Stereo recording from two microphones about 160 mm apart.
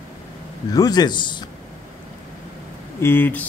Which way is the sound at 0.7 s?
25° left (ahead or behind).